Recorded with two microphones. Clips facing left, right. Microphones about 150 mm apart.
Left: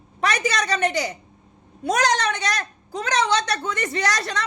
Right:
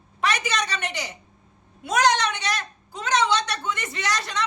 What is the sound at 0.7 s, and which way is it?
Speech, 45° left (ahead or behind).